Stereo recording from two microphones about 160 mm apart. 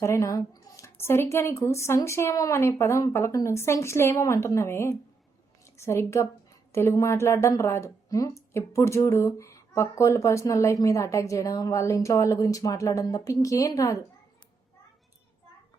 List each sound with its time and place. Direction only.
0.0 s a woman's voice: 20° left (ahead or behind)